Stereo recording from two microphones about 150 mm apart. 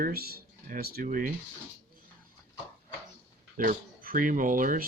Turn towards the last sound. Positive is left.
turn(degrees=-65)  # may be behind; listen again after turning